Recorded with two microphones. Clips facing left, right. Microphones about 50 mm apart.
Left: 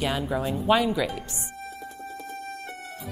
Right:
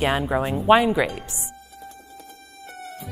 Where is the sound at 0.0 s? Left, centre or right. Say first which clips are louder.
Right 5 dB; right.